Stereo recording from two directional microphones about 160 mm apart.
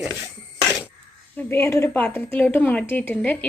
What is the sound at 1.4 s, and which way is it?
A woman's voice, 15° left (ahead or behind).